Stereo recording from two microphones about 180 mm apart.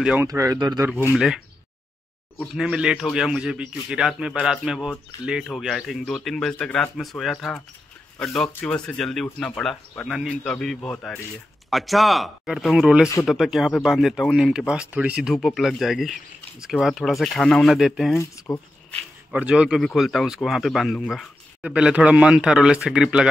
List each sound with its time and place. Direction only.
0.0 s speech: 5° right (ahead or behind)
0.3 s speech: 20° right (ahead or behind)
1.1 s speech: centre (ahead or behind)
18.1 s speech: 15° left (ahead or behind)
18.9 s speech: 5° right (ahead or behind)